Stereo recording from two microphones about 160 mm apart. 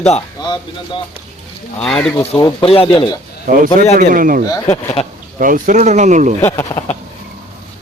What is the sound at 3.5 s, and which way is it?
Speech, 55° right (ahead or behind).